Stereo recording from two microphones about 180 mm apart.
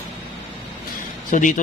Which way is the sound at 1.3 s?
45° left (ahead or behind).